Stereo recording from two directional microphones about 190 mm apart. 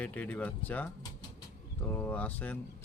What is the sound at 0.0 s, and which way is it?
Speech, 10° left (ahead or behind).